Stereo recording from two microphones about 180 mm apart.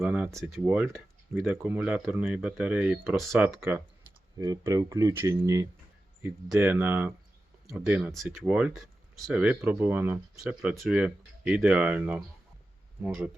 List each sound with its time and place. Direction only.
0.0 s speech: 5° right (ahead or behind)